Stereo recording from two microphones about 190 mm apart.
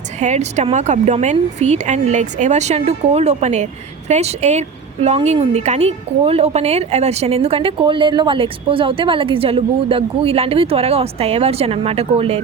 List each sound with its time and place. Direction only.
0.2 s a woman's voice: 35° right (ahead or behind)